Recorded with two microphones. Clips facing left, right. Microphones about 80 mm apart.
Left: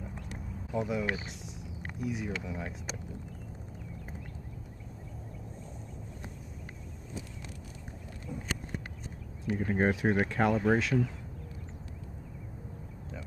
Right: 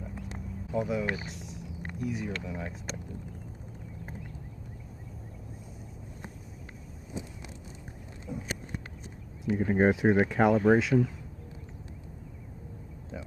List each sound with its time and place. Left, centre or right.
0.7 s speech: centre
7.2 s vehicle: right
8.3 s a sound: centre
9.4 s speech: centre